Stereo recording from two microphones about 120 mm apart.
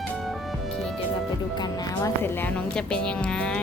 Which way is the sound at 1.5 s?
35° left (ahead or behind).